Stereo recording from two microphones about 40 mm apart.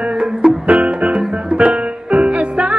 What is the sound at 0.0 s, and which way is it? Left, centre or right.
Music, right.